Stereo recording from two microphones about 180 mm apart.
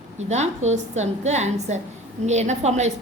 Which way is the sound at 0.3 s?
40° right (ahead or behind).